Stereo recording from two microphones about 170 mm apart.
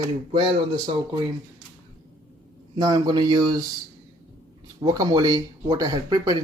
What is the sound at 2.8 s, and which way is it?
Speech, 25° right (ahead or behind).